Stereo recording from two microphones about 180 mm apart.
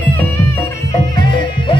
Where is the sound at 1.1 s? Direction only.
25° left (ahead or behind).